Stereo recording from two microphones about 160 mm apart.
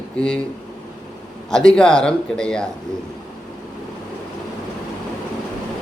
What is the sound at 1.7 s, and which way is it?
Speech, 5° left (ahead or behind).